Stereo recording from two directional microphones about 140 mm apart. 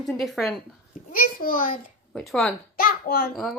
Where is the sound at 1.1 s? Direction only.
85° left.